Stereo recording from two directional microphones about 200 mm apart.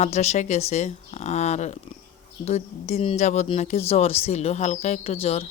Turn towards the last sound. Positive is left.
turn(degrees=30)  # may be behind; listen again after turning